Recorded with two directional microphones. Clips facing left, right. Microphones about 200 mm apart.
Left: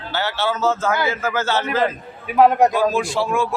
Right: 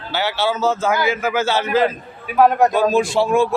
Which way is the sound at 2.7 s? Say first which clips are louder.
Right 3 dB; 25° right (ahead or behind).